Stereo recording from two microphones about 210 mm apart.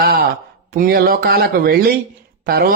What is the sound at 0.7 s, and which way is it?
A man's voice, 45° right (ahead or behind).